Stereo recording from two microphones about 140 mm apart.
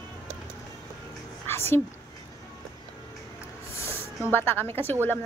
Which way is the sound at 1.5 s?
15° left (ahead or behind).